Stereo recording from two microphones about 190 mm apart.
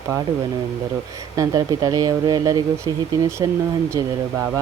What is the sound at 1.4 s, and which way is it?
Speech, 20° right (ahead or behind).